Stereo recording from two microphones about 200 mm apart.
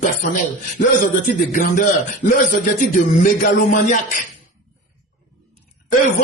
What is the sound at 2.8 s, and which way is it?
A man's voice, 45° left (ahead or behind).